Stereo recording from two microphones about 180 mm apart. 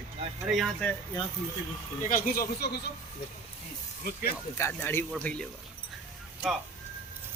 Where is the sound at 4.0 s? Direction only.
55° left (ahead or behind).